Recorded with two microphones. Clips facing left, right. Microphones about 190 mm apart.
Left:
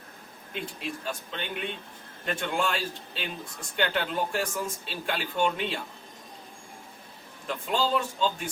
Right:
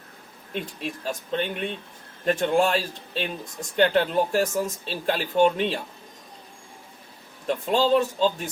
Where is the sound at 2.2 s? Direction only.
40° right (ahead or behind).